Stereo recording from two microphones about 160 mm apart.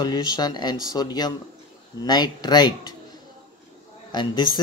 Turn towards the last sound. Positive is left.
turn(degrees=30)  # may be behind; listen again after turning